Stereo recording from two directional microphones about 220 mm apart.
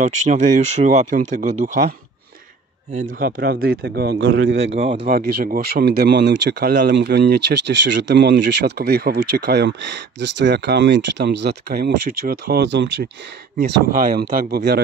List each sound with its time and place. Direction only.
0.3 s speech: 35° right (ahead or behind)